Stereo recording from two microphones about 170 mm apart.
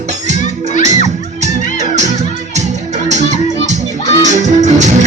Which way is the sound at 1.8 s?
45° right (ahead or behind).